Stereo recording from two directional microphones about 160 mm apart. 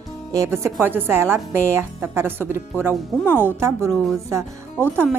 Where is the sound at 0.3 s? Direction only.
20° right (ahead or behind).